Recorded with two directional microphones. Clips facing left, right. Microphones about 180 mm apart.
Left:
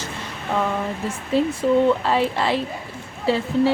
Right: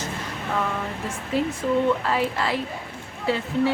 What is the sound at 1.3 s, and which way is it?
A woman's voice, 30° left (ahead or behind).